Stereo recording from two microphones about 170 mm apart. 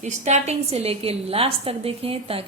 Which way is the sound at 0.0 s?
45° right (ahead or behind).